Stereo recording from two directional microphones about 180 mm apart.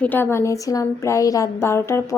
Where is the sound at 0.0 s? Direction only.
10° left (ahead or behind).